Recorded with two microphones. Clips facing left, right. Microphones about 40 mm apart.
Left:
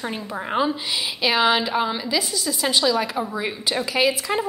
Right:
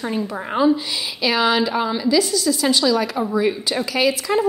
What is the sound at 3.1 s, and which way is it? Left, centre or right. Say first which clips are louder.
Speech: right 5 dB; centre.